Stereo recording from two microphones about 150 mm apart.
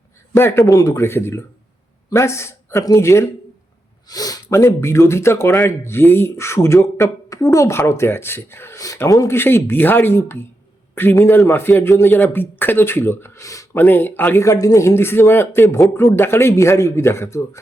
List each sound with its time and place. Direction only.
0.3 s speech: 15° left (ahead or behind)